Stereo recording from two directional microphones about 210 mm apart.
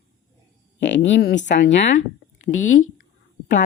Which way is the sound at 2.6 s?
70° left (ahead or behind).